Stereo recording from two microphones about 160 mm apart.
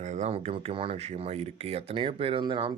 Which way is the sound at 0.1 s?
50° right (ahead or behind).